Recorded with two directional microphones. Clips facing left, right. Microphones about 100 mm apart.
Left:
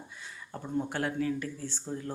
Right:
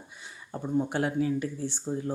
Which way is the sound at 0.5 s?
15° right (ahead or behind).